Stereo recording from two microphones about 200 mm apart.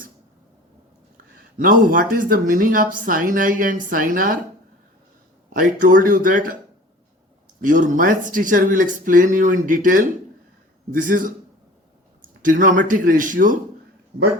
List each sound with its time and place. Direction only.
1.5 s speech: 45° right (ahead or behind)
5.5 s speech: 40° right (ahead or behind)
7.6 s speech: 40° right (ahead or behind)